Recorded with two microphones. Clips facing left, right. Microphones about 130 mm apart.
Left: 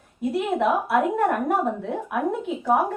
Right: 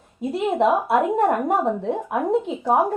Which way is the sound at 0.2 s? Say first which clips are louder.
Right 2 dB; 20° right (ahead or behind).